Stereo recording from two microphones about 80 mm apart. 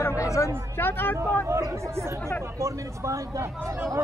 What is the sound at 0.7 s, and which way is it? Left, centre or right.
Speech, left.